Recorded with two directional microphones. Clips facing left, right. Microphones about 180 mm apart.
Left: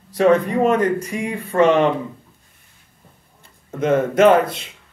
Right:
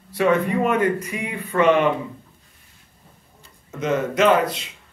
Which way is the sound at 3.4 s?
55° left (ahead or behind).